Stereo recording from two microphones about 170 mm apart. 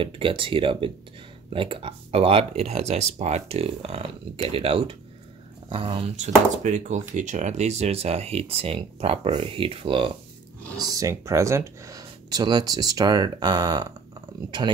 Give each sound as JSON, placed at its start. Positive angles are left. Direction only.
{"t": 0.0, "sound": "speech", "side_deg": -30}